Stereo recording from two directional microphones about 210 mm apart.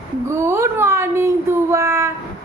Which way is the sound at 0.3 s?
10° right (ahead or behind).